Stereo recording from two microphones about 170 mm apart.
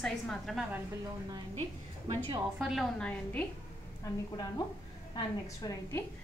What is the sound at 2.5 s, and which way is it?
Speech, centre (ahead or behind).